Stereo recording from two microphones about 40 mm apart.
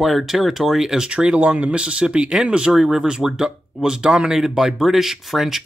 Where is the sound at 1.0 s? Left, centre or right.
Right.